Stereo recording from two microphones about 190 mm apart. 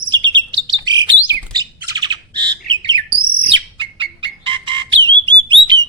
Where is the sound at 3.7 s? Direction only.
25° right (ahead or behind).